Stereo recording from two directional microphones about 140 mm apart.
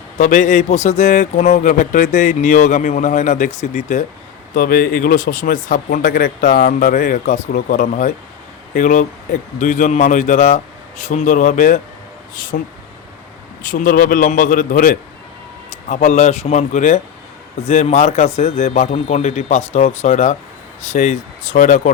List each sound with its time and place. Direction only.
0.2 s a man's voice: 60° left (ahead or behind)
4.5 s a man's voice: 90° left; by 11.8 s 65° left (ahead or behind)
12.3 s speech: 80° left
13.6 s speech: 70° left (ahead or behind)
15.9 s a man's voice: 55° left (ahead or behind)